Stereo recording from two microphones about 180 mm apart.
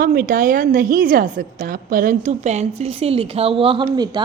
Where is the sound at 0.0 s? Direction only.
55° right (ahead or behind).